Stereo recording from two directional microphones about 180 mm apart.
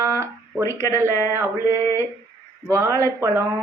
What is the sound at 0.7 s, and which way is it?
Speech, 15° left (ahead or behind).